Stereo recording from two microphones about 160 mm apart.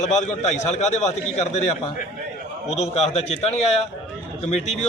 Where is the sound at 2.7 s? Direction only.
45° left (ahead or behind).